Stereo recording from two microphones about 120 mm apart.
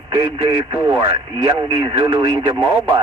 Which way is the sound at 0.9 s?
30° right (ahead or behind).